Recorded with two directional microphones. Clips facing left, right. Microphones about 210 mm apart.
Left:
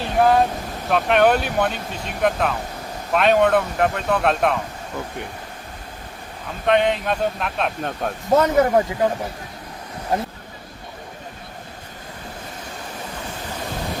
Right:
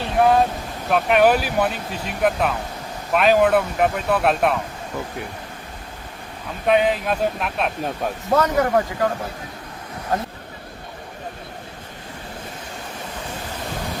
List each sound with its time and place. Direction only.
0.0 s vehicle: centre (ahead or behind)
0.9 s speech: 5° right (ahead or behind)
6.7 s speech: 5° right (ahead or behind)
8.3 s speech: 20° left (ahead or behind)